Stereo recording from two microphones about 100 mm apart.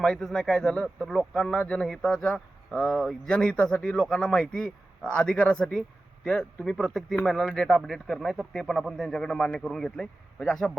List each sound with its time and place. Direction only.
0.0 s a man's voice: 5° left (ahead or behind)